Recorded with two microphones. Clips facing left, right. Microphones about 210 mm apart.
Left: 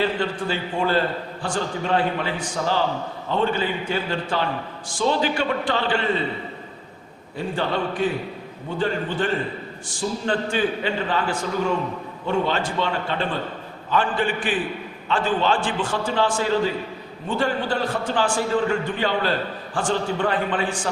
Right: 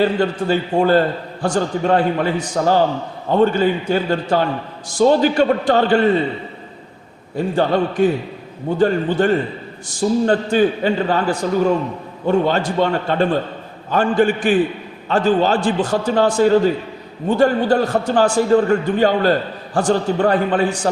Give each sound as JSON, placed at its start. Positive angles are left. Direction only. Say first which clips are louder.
{"t": 0.0, "sound": "a man's voice", "louder": "right 6 dB", "side_deg": -45}
{"t": 7.3, "sound": "a man's voice", "louder": "right 8 dB", "side_deg": -45}